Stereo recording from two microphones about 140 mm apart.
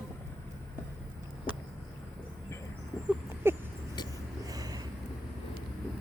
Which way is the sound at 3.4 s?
15° right (ahead or behind).